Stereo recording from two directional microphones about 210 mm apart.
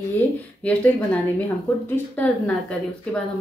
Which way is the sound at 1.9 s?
5° left (ahead or behind).